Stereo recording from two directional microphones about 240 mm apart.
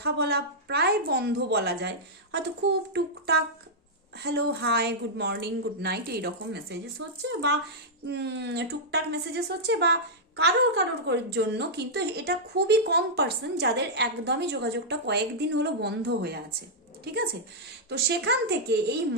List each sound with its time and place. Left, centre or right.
0.0 s speech: right
2.9 s speech: right